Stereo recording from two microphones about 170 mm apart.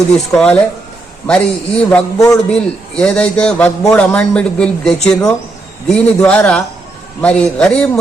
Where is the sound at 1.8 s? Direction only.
5° left (ahead or behind).